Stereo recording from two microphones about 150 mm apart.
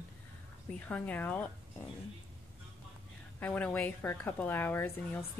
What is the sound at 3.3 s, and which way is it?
A woman's voice, 10° left (ahead or behind).